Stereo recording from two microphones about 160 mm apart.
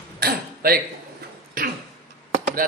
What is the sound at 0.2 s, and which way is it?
Throat clearing, 75° right (ahead or behind).